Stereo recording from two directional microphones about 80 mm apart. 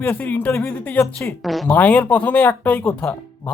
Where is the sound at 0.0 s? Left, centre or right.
Left.